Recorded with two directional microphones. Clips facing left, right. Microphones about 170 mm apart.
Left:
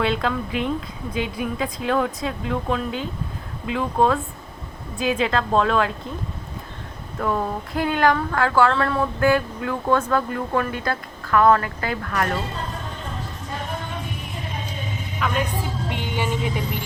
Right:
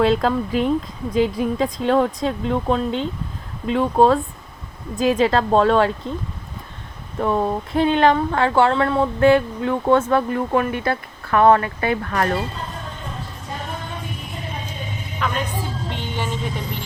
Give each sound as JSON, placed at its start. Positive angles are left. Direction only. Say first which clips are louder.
{"t": 0.0, "sound": "speech", "louder": "right 5 dB", "side_deg": -35}
{"t": 7.2, "sound": "speech", "louder": "right 4 dB", "side_deg": -25}
{"t": 15.2, "sound": "a woman's voice", "louder": "right 1 dB", "side_deg": 5}
{"t": 15.9, "sound": "vehicle", "louder": "left 3 dB", "side_deg": 10}